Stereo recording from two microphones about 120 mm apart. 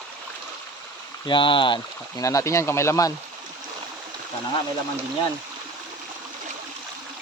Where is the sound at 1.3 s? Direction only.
45° left (ahead or behind).